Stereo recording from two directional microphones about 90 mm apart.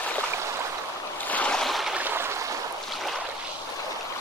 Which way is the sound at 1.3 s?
15° left (ahead or behind).